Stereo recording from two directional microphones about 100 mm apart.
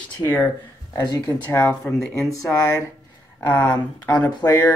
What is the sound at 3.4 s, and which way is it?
Speech, 20° left (ahead or behind).